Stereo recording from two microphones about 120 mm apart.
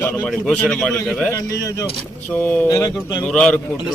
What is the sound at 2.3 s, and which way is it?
Speech, 10° left (ahead or behind).